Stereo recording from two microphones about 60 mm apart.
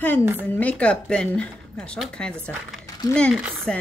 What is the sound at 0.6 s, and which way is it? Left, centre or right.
A woman's voice, left.